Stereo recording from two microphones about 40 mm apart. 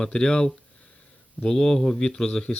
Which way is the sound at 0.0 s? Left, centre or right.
Left.